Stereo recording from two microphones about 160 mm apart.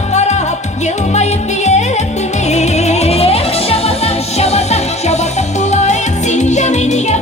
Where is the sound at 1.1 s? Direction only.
45° left (ahead or behind).